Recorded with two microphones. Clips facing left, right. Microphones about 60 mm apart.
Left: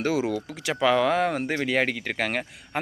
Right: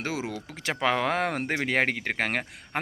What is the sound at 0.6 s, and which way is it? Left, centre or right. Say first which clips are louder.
Speech: left 4 dB; right.